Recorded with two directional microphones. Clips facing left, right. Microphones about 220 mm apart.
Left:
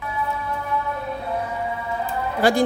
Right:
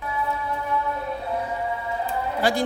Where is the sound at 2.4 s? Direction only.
50° left (ahead or behind).